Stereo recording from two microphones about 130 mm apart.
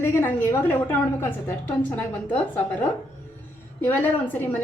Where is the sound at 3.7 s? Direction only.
15° left (ahead or behind).